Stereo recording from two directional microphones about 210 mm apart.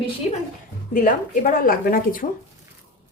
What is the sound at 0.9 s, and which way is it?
A woman's voice, 40° left (ahead or behind).